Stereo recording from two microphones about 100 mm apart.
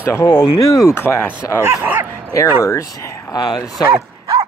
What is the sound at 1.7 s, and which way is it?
Speech, 20° right (ahead or behind).